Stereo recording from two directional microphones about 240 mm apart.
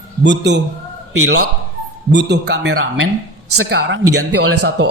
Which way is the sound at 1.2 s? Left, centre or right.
Right.